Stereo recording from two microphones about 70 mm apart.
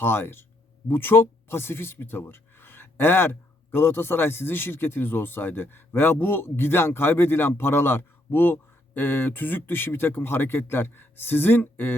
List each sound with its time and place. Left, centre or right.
0.0 s speech: left